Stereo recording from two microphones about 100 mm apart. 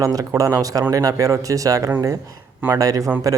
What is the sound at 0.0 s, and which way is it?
Speech, 35° right (ahead or behind).